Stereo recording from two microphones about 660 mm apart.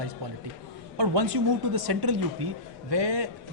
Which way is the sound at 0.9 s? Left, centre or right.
Right.